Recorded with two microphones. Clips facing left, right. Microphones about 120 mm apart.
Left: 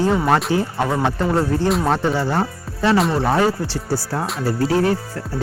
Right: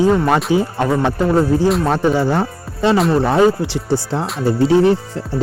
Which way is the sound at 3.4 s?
20° right (ahead or behind).